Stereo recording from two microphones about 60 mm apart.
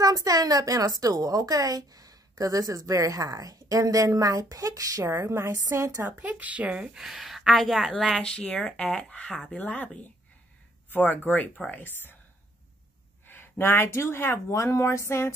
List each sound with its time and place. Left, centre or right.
0.0 s a woman's voice: right
5.0 s a woman's voice: right
5.5 s a woman's voice: right
6.4 s speech: right
7.1 s a woman's voice: centre
8.1 s speech: centre
11.8 s speech: left
13.3 s a sound: left
13.8 s a woman's voice: left